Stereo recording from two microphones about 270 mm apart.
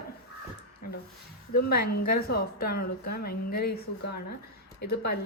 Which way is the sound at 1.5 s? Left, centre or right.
Left.